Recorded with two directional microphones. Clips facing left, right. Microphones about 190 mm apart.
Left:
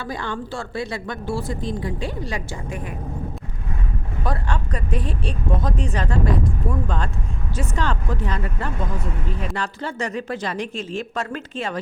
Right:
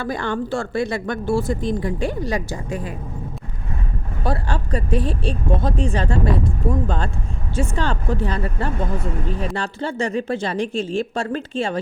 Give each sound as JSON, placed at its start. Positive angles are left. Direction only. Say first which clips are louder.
{"t": 0.0, "sound": "speech", "louder": "right 5 dB", "side_deg": -50}
{"t": 4.2, "sound": "speech", "louder": "right 3 dB", "side_deg": -30}